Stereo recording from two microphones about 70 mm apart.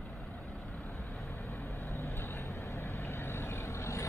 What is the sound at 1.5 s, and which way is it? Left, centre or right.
Vehicle, left.